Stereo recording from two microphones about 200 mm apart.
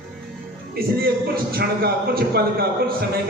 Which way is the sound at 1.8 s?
50° right (ahead or behind).